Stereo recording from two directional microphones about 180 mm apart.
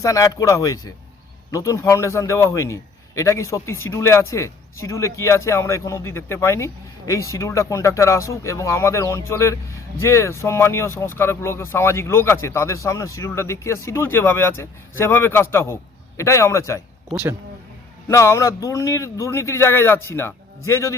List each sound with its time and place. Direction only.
0.0 s a man's voice: 20° left (ahead or behind)
18.1 s a man's voice: 15° left (ahead or behind)